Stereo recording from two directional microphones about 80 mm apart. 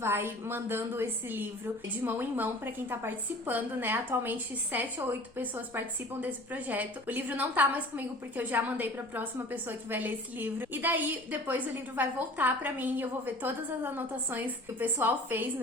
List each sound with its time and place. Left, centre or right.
0.0 s a woman's voice: right